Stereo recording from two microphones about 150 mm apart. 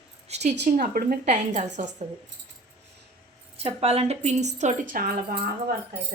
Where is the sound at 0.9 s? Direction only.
65° right (ahead or behind).